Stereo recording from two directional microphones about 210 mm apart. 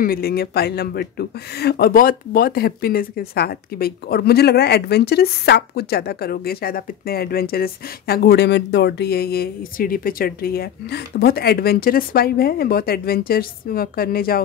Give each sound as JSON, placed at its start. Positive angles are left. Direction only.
{"t": 0.0, "sound": "speech", "side_deg": 45}